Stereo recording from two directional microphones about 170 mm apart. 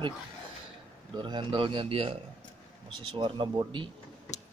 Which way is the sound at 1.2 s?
30° right (ahead or behind).